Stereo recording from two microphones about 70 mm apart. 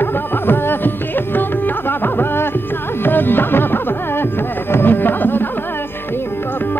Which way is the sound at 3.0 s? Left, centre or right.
Left.